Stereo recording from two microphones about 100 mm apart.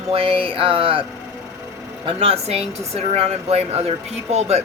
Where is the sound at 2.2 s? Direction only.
90° right.